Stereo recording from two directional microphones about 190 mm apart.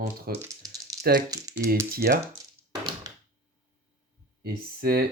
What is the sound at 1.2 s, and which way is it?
Speech, 20° right (ahead or behind).